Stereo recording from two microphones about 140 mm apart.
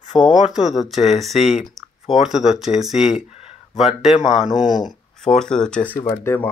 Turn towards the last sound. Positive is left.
turn(degrees=15)  # may be behind; listen again after turning